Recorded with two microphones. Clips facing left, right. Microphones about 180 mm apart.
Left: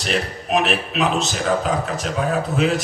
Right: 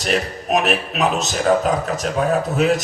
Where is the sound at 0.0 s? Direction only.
40° right (ahead or behind).